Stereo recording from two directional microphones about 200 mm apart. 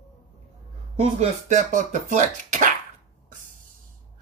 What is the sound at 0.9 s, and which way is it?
Speech, 35° right (ahead or behind).